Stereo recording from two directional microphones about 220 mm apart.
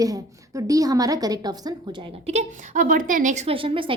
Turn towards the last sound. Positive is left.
turn(degrees=-25)  # may be behind; listen again after turning